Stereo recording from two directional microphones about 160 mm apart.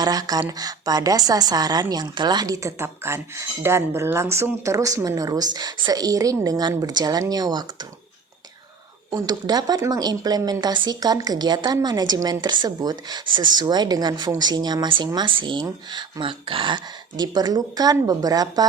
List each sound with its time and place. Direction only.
0.0 s a woman's voice: 25° right (ahead or behind)
9.0 s a woman's voice: 25° right (ahead or behind)